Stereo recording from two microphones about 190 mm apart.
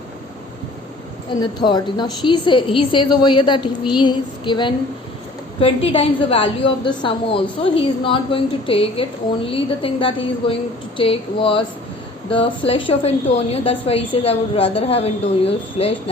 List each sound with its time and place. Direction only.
1.4 s a woman's voice: 25° left (ahead or behind)